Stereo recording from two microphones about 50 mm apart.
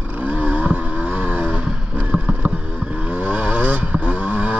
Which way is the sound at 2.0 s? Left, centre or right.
Right.